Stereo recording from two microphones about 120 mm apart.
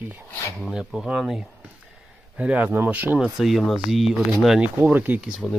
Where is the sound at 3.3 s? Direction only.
Centre (ahead or behind).